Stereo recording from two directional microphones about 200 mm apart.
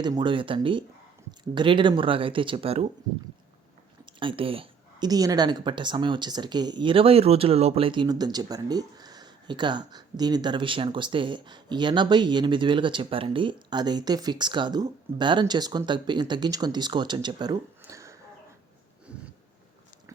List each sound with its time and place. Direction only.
0.0 s a woman's voice: 20° right (ahead or behind)
4.0 s a woman's voice: 25° right (ahead or behind)
19.1 s a sound: 5° right (ahead or behind)